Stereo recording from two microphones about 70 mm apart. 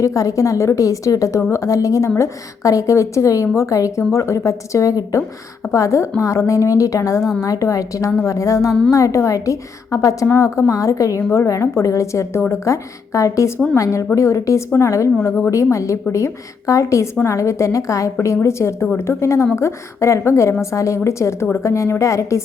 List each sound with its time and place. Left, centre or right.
0.0 s a woman's voice: left
7.2 s a woman's voice: centre
7.4 s a woman's voice: left